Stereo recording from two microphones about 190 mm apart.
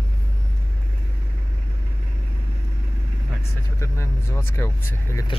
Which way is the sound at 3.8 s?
15° left (ahead or behind).